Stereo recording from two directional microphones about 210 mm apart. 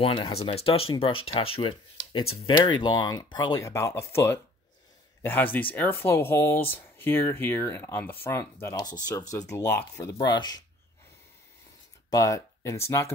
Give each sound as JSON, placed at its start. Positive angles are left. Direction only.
{"t": 0.0, "sound": "speech", "side_deg": 25}
{"t": 12.1, "sound": "speech", "side_deg": 15}